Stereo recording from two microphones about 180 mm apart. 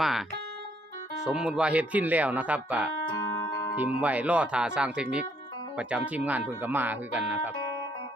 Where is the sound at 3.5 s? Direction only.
15° left (ahead or behind).